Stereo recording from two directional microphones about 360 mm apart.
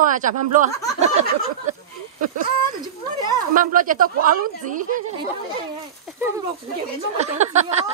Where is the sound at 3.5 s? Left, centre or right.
Right.